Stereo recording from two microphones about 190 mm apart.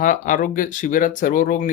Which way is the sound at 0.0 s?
45° left (ahead or behind).